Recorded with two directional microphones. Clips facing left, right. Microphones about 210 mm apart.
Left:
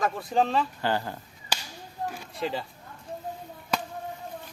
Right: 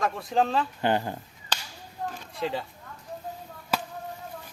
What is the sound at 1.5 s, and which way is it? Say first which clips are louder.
Whip: left 1 dB; 10° left (ahead or behind).